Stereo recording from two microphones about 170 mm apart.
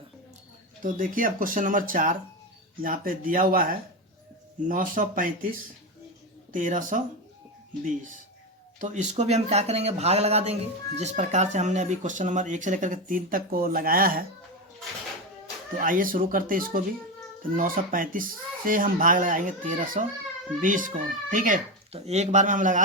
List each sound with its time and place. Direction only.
0.8 s speech: 50° right (ahead or behind)
4.7 s speech: 55° right (ahead or behind)
8.8 s speech: 45° right (ahead or behind)
15.8 s speech: 50° right (ahead or behind)